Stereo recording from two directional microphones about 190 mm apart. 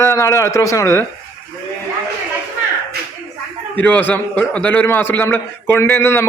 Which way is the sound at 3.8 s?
10° left (ahead or behind).